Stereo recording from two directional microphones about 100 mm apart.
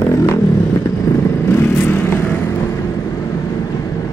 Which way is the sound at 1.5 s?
25° left (ahead or behind).